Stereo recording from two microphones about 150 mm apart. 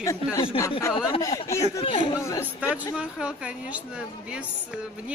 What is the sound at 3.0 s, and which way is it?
A woman's voice, 5° right (ahead or behind).